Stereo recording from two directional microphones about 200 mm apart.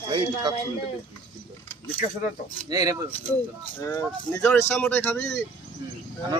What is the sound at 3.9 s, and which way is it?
Speech, 10° left (ahead or behind).